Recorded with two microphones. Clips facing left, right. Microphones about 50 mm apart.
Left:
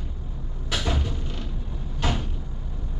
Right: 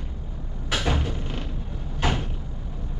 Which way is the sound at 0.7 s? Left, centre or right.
Right.